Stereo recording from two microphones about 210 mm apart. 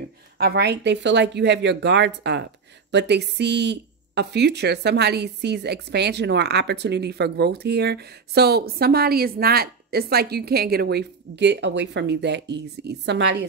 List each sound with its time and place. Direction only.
0.4 s speech: 50° right (ahead or behind)